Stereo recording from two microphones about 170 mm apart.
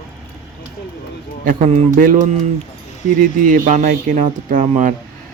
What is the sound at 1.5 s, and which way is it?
Speech, 45° right (ahead or behind).